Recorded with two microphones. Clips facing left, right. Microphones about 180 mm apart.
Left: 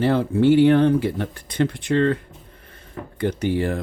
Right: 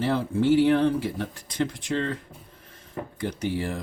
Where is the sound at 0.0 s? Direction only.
60° left (ahead or behind).